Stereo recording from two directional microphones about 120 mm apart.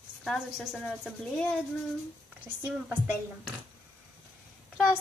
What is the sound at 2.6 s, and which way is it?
Speech, 20° right (ahead or behind).